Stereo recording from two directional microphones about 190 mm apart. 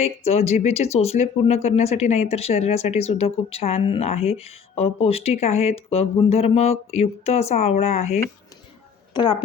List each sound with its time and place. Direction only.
0.0 s speech: 35° left (ahead or behind)
9.1 s a woman's voice: 20° left (ahead or behind)